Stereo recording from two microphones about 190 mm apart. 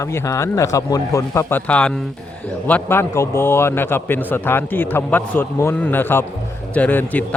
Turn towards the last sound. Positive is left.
turn(degrees=10)  # may be behind; listen again after turning